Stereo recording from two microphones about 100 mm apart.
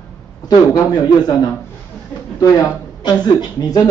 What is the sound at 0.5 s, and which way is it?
Speech, 45° left (ahead or behind).